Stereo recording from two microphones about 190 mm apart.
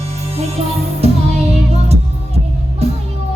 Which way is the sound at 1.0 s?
35° right (ahead or behind).